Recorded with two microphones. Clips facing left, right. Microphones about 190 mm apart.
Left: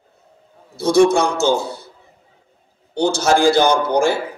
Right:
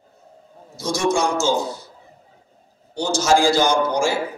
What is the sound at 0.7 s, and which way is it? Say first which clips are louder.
Speech: left 8 dB; 60° left (ahead or behind).